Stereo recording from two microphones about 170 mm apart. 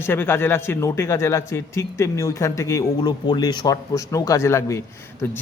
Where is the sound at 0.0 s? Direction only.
15° left (ahead or behind).